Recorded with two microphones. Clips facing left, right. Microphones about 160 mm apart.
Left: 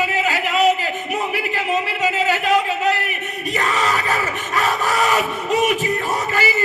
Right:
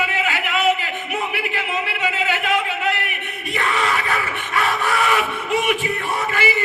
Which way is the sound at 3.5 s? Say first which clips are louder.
Left 1 dB; 40° left (ahead or behind).